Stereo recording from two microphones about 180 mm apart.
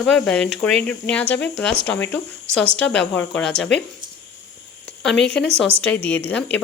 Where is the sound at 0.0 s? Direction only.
5° left (ahead or behind).